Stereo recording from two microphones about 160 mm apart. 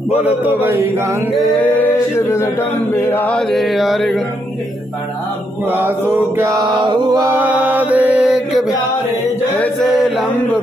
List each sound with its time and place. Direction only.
0.4 s mantra: 10° right (ahead or behind)
1.6 s chant: 15° left (ahead or behind)
5.7 s mantra: 15° right (ahead or behind)
6.8 s mantra: 30° right (ahead or behind)
7.3 s mantra: 10° right (ahead or behind)
9.6 s chant: centre (ahead or behind)